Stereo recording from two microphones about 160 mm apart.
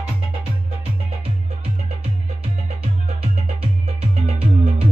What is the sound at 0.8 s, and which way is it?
Music, 40° right (ahead or behind).